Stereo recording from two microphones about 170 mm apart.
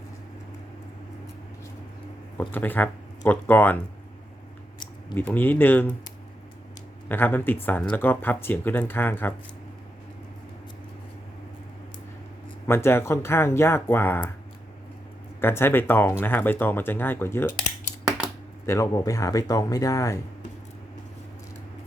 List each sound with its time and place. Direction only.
2.4 s speech: 10° left (ahead or behind)
5.1 s speech: 10° left (ahead or behind)
7.1 s speech: 10° left (ahead or behind)
12.6 s speech: 15° left (ahead or behind)
15.4 s speech: 15° left (ahead or behind)
18.6 s speech: 15° left (ahead or behind)